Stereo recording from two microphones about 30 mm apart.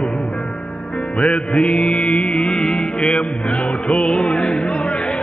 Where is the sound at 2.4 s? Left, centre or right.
Left.